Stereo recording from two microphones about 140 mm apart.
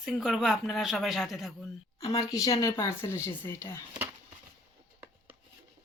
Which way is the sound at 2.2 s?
25° left (ahead or behind).